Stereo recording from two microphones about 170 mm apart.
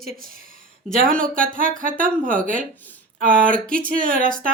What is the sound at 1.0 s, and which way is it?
Speech, 55° right (ahead or behind).